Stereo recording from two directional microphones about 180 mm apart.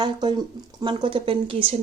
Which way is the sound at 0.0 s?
25° right (ahead or behind).